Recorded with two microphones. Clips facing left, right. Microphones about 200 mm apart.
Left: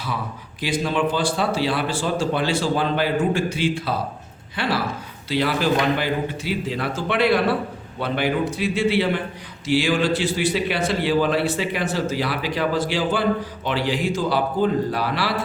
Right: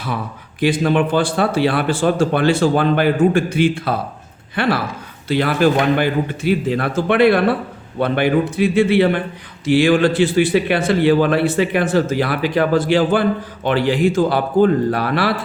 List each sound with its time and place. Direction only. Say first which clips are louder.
0.6 s a man's voice: right 6 dB; 55° right (ahead or behind)